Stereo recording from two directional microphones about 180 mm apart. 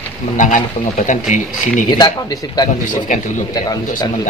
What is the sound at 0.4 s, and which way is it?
Speech, 45° left (ahead or behind).